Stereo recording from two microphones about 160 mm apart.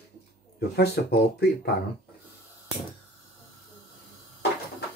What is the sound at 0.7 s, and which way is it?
Speech, 90° left.